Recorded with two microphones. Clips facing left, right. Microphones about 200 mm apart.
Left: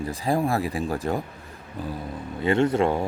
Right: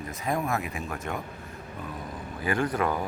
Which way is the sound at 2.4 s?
25° left (ahead or behind).